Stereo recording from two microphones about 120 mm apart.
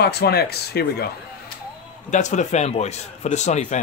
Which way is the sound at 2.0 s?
85° left.